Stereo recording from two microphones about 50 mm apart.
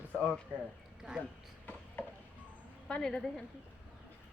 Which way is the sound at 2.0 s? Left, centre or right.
Left.